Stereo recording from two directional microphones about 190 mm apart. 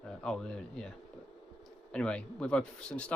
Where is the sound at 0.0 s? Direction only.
5° left (ahead or behind).